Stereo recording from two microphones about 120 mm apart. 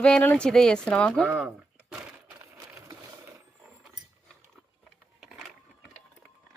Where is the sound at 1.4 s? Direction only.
5° right (ahead or behind).